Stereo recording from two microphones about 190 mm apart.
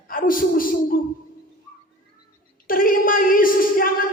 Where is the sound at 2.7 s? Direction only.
50° left (ahead or behind).